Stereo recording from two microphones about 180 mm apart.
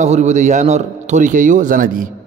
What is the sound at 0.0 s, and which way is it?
Mantra, 40° right (ahead or behind).